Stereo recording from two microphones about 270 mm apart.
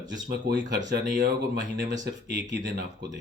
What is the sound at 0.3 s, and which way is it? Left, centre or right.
Speech, right.